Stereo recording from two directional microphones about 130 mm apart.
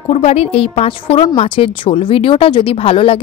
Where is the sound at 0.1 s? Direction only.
50° left (ahead or behind).